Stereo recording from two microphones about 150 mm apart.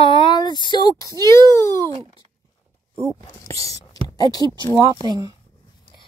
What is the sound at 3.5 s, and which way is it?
Speech, 20° left (ahead or behind).